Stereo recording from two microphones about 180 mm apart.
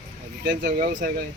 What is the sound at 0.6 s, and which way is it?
Speech, 55° right (ahead or behind).